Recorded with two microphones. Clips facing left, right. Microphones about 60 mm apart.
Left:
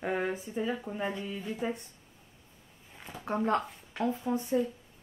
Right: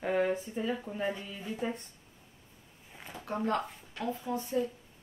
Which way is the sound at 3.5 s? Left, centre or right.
Centre.